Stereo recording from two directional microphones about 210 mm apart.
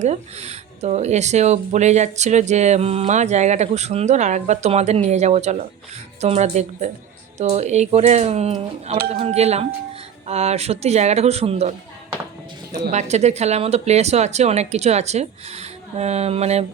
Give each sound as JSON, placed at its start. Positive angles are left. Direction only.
{"t": 0.0, "sound": "speech", "side_deg": -30}
{"t": 12.9, "sound": "speech", "side_deg": -35}